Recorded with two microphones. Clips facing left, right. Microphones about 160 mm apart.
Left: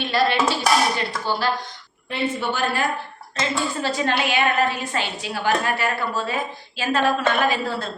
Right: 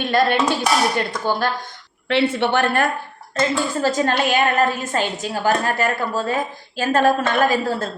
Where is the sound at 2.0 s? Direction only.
85° right; by 2.9 s 60° right (ahead or behind).